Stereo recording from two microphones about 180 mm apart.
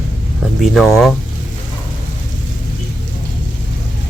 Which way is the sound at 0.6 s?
Centre (ahead or behind).